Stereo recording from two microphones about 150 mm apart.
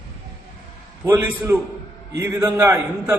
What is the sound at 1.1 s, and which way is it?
Speech, 10° right (ahead or behind).